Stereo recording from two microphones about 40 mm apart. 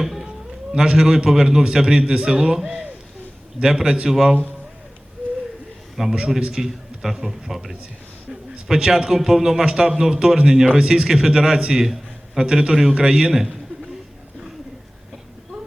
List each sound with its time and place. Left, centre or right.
0.0 s a sound: centre
0.7 s a man's voice: centre
3.6 s a man's voice: centre
4.1 s a man's voice: centre
6.0 s a man's voice: centre
11.8 s a sound: centre
12.5 s a man's voice: centre